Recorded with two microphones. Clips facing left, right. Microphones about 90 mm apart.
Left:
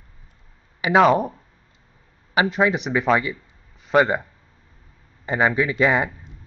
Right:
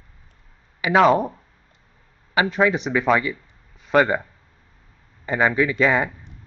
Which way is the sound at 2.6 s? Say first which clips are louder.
Right 1 dB; 15° left (ahead or behind).